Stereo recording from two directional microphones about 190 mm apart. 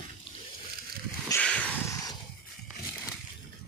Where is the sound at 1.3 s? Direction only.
5° left (ahead or behind).